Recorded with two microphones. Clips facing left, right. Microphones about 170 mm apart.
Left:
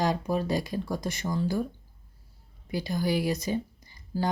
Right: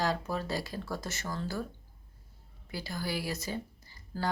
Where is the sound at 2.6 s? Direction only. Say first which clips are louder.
Left 8 dB; 20° left (ahead or behind).